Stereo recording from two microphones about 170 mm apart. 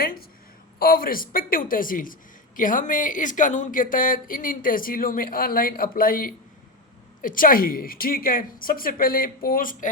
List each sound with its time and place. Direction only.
0.0 s a woman's voice: 60° left (ahead or behind)